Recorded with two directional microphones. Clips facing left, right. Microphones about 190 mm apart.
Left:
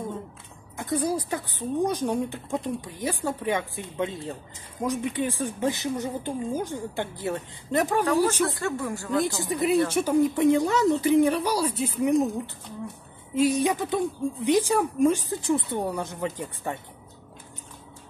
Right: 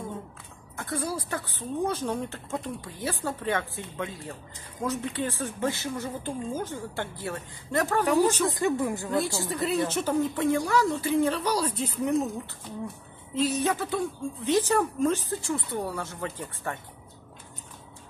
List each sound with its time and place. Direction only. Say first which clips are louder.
0.7 s a woman's voice: left 5 dB; 15° left (ahead or behind)
8.0 s speech: right 3 dB; 15° right (ahead or behind)
9.1 s a woman's voice: left 2 dB; 20° left (ahead or behind)
13.3 s a woman's voice: left 4 dB; 10° left (ahead or behind)